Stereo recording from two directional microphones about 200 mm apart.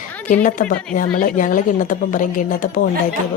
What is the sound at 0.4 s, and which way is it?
A woman's voice, 40° left (ahead or behind).